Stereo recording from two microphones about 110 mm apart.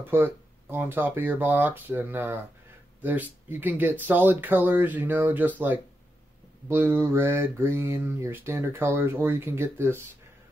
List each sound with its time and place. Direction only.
0.0 s speech: 20° right (ahead or behind)
6.7 s speech: 20° right (ahead or behind)